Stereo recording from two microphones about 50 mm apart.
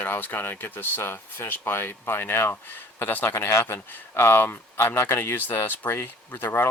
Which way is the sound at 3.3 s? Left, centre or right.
Left.